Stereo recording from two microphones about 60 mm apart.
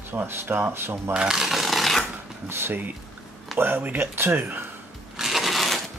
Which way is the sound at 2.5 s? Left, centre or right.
Right.